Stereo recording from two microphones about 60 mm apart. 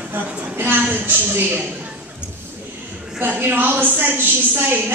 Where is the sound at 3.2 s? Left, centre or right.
Right.